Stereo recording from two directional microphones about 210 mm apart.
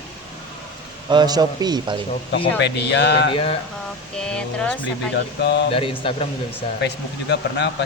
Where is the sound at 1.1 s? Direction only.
20° right (ahead or behind).